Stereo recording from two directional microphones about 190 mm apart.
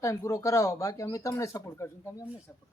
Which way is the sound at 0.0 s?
15° left (ahead or behind).